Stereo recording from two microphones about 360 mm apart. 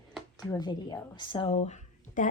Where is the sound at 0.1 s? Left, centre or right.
Centre.